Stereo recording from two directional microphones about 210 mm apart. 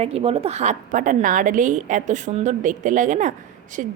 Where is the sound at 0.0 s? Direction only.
30° right (ahead or behind).